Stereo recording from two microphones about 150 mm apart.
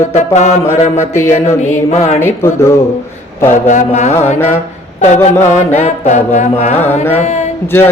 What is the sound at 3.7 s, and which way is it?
Music, 50° left (ahead or behind).